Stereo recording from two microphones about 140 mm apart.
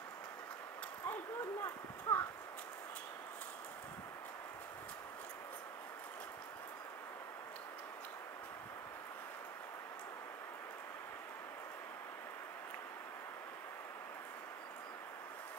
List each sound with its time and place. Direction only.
1.0 s clip-clop: 20° left (ahead or behind)